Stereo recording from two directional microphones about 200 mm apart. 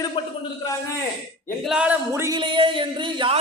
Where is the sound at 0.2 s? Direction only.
25° left (ahead or behind).